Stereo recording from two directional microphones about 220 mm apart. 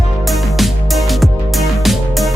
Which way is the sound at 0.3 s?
Centre (ahead or behind).